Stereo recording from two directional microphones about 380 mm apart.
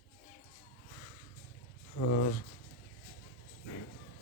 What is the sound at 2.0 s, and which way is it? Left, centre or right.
Speech, left.